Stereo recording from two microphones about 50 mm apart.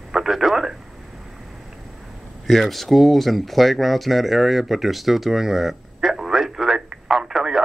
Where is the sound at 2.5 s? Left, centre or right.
Centre.